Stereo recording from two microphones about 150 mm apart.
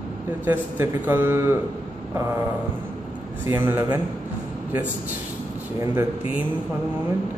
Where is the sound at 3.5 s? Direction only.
15° right (ahead or behind).